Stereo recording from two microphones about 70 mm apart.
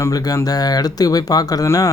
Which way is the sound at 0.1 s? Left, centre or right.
Left.